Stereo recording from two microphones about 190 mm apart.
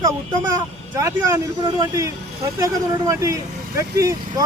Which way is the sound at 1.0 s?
15° right (ahead or behind).